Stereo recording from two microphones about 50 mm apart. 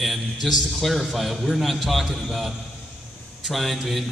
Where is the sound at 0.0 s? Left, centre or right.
Centre.